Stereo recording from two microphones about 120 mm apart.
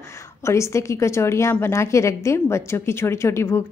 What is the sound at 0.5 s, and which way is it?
A woman's voice, 25° left (ahead or behind).